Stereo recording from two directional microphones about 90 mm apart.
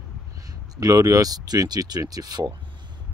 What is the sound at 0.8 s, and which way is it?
Speech, 40° right (ahead or behind).